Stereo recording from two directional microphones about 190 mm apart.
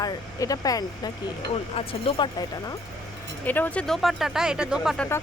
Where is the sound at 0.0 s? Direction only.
20° left (ahead or behind).